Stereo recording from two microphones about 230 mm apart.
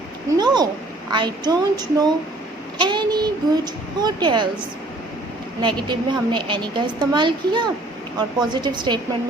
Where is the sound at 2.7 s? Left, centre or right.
Centre.